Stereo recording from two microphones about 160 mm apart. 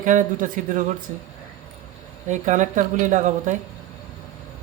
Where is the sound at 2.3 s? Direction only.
50° right (ahead or behind).